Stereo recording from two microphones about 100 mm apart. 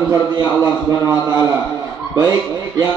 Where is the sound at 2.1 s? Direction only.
40° right (ahead or behind).